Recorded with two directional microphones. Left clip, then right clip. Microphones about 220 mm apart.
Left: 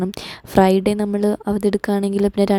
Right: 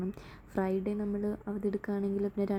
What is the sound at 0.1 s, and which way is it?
A woman's voice, 35° left (ahead or behind).